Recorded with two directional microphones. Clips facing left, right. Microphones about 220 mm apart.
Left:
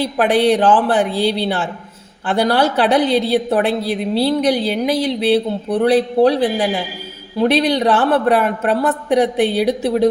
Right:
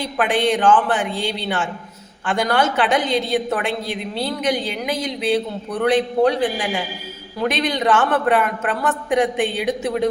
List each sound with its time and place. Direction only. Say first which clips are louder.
0.0 s a woman's voice: left 5 dB; 35° left (ahead or behind)